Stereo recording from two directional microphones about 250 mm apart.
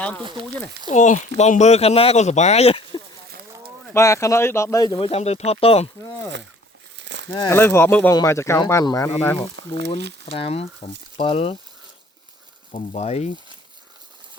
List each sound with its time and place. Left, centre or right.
0.2 s speech: centre
0.9 s speech: left
3.9 s speech: centre
6.9 s crumpling: right
7.3 s speech: centre
9.6 s speech: right
10.3 s speech: left
12.7 s speech: left